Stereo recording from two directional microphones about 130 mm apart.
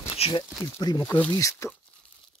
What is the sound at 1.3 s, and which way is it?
Speech, 25° left (ahead or behind).